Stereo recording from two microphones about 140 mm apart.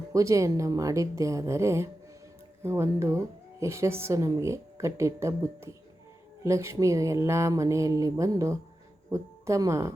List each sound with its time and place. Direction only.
0.1 s speech: 20° right (ahead or behind)